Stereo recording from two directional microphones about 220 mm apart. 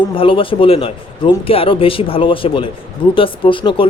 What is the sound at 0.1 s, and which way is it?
Speech, 25° left (ahead or behind).